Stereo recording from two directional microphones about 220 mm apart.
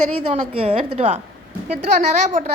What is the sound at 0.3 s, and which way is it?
A woman's voice, 30° right (ahead or behind).